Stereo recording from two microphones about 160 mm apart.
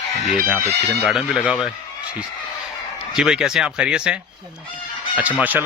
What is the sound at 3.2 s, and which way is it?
Speech, 5° right (ahead or behind).